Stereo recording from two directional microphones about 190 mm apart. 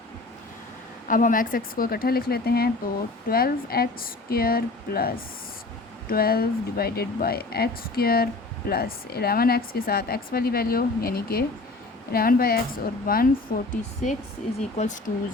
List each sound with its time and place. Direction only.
1.0 s speech: 45° left (ahead or behind)